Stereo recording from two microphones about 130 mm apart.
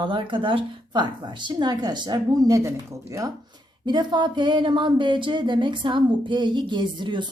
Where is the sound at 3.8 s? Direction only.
35° right (ahead or behind).